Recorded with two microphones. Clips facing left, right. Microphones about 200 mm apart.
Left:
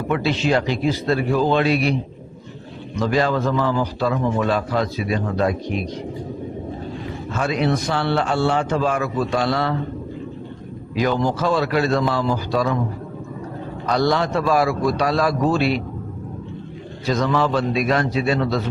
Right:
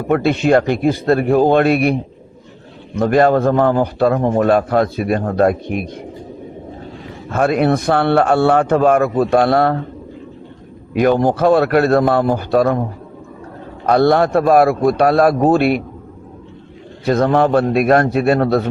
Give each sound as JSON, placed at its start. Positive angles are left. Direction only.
{"t": 0.1, "sound": "a man's voice", "side_deg": -55}
{"t": 7.3, "sound": "a man's voice", "side_deg": -55}
{"t": 10.9, "sound": "a man's voice", "side_deg": -55}
{"t": 13.8, "sound": "a man's voice", "side_deg": -55}
{"t": 17.1, "sound": "a man's voice", "side_deg": -55}